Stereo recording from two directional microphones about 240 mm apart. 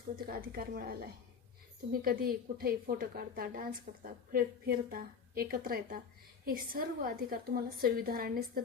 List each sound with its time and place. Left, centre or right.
0.3 s a woman's voice: right